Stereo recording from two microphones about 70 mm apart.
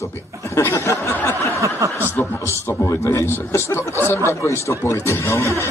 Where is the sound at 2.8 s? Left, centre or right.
Left.